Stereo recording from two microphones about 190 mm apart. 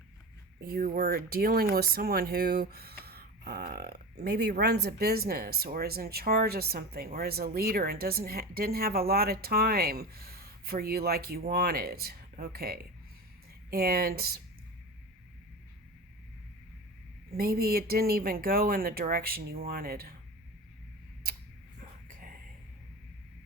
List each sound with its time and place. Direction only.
0.6 s speech: 50° right (ahead or behind)
17.3 s speech: 55° right (ahead or behind)
21.2 s a sound: 55° right (ahead or behind)